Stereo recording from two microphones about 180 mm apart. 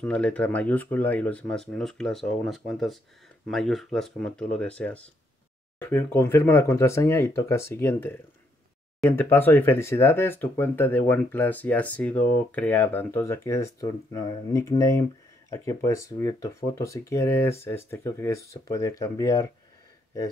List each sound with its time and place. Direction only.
0.0 s speech: 5° left (ahead or behind)